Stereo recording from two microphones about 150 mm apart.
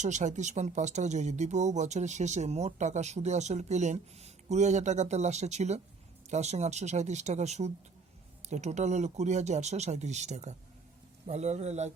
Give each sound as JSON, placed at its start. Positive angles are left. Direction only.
{"t": 0.0, "sound": "speech", "side_deg": -55}